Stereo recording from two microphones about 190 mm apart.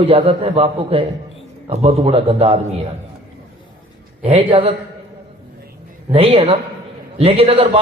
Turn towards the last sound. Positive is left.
turn(degrees=-30)  # may be behind; listen again after turning